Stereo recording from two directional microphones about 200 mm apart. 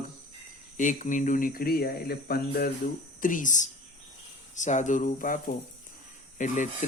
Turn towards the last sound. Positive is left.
turn(degrees=40)  # may be behind; listen again after turning